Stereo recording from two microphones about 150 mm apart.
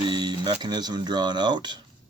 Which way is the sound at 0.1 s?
30° right (ahead or behind).